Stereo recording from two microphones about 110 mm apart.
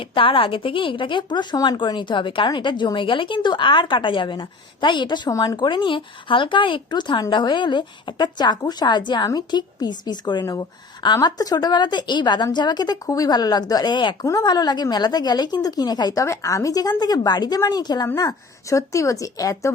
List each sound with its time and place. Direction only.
0.0 s a woman's voice: 50° left (ahead or behind)
5.3 s speech: 30° left (ahead or behind)
5.5 s a woman's voice: 45° left (ahead or behind)
16.2 s a woman's voice: 30° left (ahead or behind)